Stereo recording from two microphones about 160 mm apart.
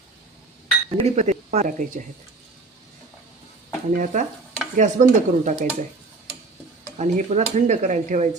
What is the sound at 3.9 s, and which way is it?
Speech, 55° right (ahead or behind).